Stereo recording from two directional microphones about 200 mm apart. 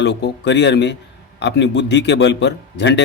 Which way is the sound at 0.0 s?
60° left (ahead or behind).